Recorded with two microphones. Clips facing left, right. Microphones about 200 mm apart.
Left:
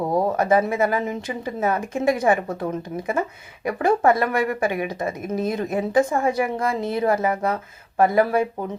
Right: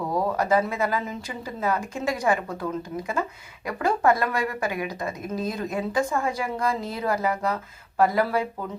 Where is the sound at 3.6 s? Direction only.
25° left (ahead or behind).